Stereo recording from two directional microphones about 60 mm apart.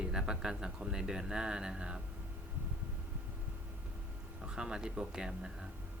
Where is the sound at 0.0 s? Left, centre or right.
Centre.